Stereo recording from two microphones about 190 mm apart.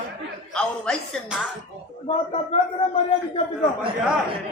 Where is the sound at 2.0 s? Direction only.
30° left (ahead or behind).